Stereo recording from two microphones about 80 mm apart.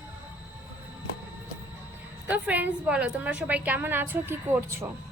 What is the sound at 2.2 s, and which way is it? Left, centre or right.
A woman's voice, centre.